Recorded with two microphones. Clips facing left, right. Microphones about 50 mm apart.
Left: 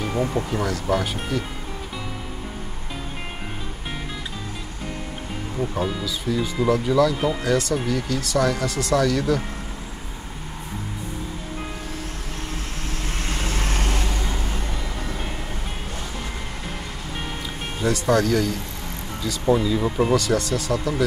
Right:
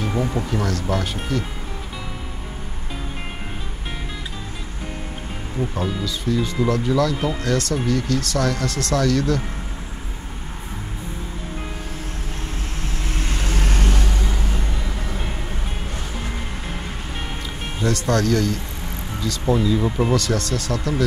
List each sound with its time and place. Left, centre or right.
0.5 s speech: centre
5.6 s speech: centre
13.6 s vehicle: left
17.8 s speech: centre